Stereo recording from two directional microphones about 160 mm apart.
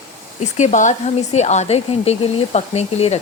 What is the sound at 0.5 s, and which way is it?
A woman's voice, 50° left (ahead or behind).